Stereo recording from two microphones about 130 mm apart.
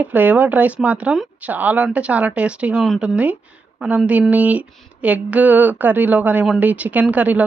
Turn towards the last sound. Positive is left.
turn(degrees=-10)  # may be behind; listen again after turning